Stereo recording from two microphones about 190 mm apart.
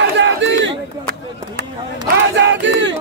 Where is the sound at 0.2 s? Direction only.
70° right (ahead or behind).